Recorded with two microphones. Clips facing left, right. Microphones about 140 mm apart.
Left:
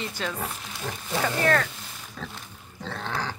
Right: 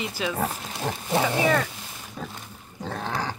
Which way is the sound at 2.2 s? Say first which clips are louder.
Right 3 dB; 25° right (ahead or behind).